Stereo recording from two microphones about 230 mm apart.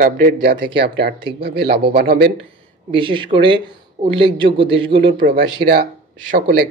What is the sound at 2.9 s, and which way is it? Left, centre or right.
Speech, right.